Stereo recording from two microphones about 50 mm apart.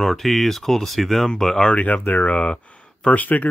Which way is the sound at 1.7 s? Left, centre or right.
Left.